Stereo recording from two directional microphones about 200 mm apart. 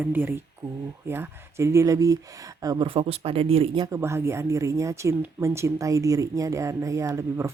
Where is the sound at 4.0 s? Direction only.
10° right (ahead or behind).